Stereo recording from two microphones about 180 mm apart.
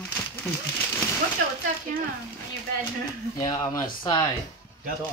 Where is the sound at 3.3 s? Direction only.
20° left (ahead or behind).